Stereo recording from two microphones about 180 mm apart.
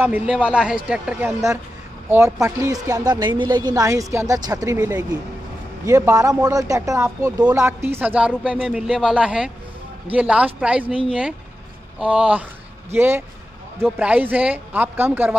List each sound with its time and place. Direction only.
0.0 s a man's voice: 10° right (ahead or behind)
12.0 s speech: 5° right (ahead or behind)